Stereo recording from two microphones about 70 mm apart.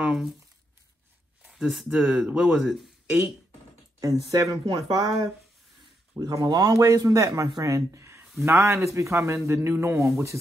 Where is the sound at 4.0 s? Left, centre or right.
Right.